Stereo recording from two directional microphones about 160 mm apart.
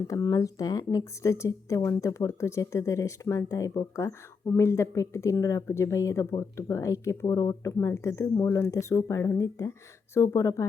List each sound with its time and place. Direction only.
0.1 s speech: 20° left (ahead or behind)